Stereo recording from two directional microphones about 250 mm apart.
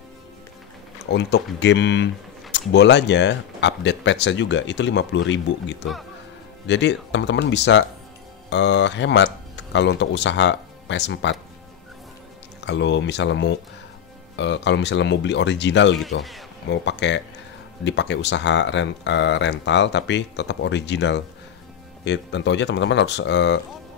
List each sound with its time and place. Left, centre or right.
0.9 s speech: left
12.5 s speech: left
16.0 s a man's voice: centre
16.7 s speech: left